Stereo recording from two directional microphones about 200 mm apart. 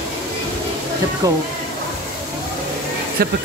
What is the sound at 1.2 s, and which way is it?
Speech, 15° right (ahead or behind).